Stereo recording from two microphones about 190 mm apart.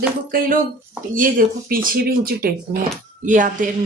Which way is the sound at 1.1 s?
45° right (ahead or behind).